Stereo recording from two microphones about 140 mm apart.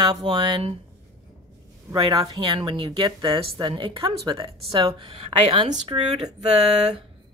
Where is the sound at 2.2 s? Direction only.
35° right (ahead or behind).